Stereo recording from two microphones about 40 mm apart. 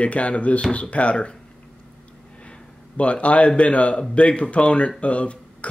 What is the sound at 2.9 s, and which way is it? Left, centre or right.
Speech, left.